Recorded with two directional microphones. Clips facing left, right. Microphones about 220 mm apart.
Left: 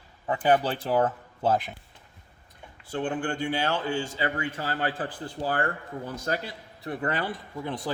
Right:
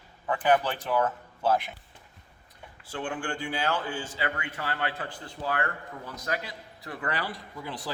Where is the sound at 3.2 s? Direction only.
25° left (ahead or behind).